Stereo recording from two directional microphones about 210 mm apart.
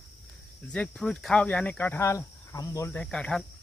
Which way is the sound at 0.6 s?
5° left (ahead or behind).